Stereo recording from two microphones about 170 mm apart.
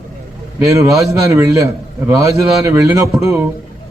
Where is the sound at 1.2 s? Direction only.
20° right (ahead or behind).